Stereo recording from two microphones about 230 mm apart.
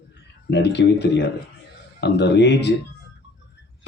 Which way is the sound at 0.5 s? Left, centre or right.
Left.